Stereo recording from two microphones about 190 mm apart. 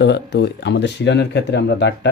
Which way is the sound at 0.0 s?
60° left (ahead or behind).